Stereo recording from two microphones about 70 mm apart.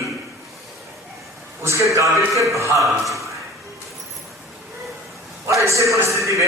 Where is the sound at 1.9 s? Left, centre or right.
Right.